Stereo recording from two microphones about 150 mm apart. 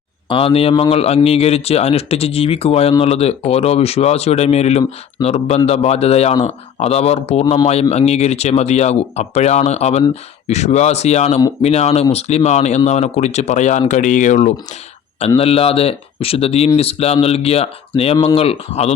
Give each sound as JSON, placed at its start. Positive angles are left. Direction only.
{"t": 0.3, "sound": "speech", "side_deg": 40}
{"t": 15.4, "sound": "speech", "side_deg": 40}